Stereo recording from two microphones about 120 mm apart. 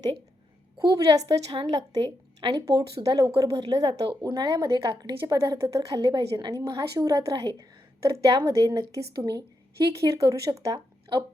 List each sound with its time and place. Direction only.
0.8 s speech: 35° right (ahead or behind)
1.5 s a woman's voice: 50° right (ahead or behind); by 3.8 s 30° right (ahead or behind)
3.8 s speech: 50° right (ahead or behind)
4.2 s speech: 35° right (ahead or behind)
9.9 s speech: 25° right (ahead or behind)
11.1 s speech: 40° right (ahead or behind)